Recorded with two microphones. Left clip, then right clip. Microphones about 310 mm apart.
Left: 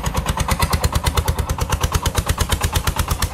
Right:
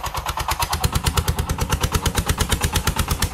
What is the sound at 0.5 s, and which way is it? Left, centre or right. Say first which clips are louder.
Vehicle: left 1 dB; centre.